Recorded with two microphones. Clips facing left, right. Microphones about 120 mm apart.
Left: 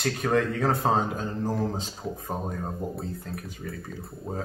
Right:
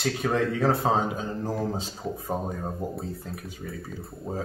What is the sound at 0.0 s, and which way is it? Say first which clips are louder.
Speech: left 1 dB; centre (ahead or behind).